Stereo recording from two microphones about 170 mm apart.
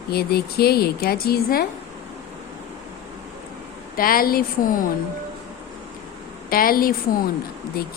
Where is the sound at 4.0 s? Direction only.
60° left (ahead or behind).